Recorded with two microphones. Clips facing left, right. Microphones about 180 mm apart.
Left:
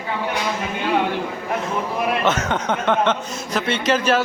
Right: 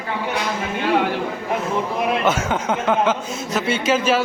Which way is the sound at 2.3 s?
10° right (ahead or behind).